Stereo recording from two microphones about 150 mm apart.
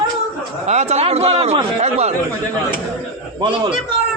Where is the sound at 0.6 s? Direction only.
50° right (ahead or behind).